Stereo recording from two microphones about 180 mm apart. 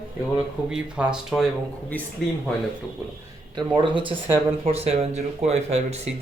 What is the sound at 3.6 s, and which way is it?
Speech, 25° right (ahead or behind).